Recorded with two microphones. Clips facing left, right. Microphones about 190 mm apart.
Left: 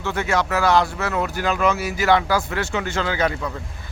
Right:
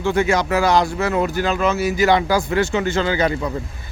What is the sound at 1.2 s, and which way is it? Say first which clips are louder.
Speech: left 1 dB; 10° left (ahead or behind).